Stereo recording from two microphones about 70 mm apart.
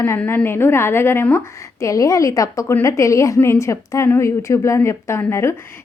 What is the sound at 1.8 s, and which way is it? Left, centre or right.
A woman's voice, left.